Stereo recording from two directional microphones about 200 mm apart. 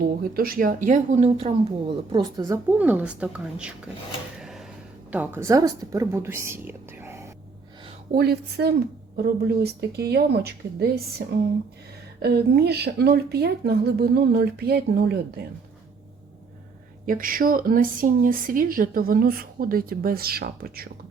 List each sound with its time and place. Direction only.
0.0 s speech: 50° right (ahead or behind); by 3.8 s 5° right (ahead or behind)
4.4 s a sound: centre (ahead or behind)
5.1 s a woman's voice: 10° right (ahead or behind)
8.1 s speech: 55° right (ahead or behind)
12.2 s speech: 55° right (ahead or behind)
17.1 s speech: 45° right (ahead or behind)